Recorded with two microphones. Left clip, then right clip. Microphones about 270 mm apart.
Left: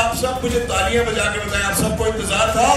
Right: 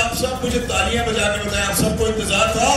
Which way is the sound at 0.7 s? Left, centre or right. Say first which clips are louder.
Left 1 dB; centre.